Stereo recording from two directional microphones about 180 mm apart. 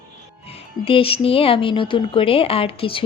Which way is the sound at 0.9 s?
30° left (ahead or behind).